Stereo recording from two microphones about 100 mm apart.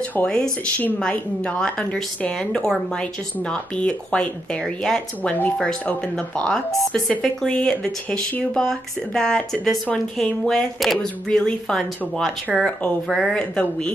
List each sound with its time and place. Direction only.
0.1 s a woman's voice: 10° left (ahead or behind)